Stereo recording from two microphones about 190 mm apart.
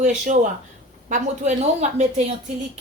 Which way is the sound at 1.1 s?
40° right (ahead or behind).